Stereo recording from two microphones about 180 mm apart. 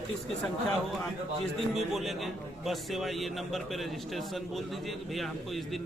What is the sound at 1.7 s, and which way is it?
A man's voice, centre (ahead or behind).